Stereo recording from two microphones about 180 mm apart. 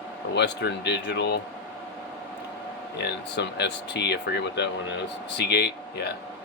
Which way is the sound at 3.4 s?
70° left (ahead or behind).